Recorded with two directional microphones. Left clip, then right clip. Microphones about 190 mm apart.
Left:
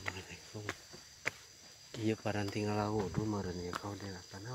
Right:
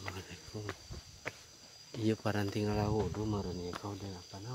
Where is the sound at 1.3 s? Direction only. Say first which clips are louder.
Left 4 dB; 65° left (ahead or behind).